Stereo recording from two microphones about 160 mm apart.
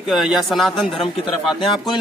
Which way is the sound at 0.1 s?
Centre (ahead or behind).